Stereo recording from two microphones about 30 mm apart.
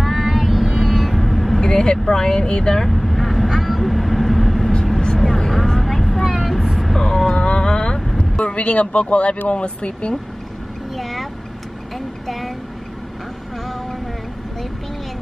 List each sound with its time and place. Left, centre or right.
0.0 s music: centre
0.3 s vehicle: centre
1.6 s speech: left
2.8 s vehicle: centre
7.0 s vehicle: centre
7.3 s a sound: left
8.2 s speech: left
11.0 s vehicle: centre